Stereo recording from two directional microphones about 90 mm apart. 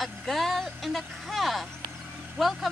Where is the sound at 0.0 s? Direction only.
Centre (ahead or behind).